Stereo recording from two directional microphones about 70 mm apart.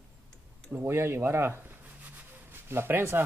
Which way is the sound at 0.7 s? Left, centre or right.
Right.